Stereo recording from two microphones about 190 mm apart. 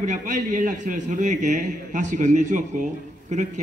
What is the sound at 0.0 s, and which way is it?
A man's voice, 40° right (ahead or behind).